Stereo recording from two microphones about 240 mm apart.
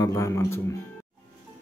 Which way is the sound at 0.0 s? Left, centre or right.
Centre.